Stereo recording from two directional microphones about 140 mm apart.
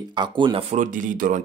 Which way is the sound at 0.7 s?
65° right (ahead or behind).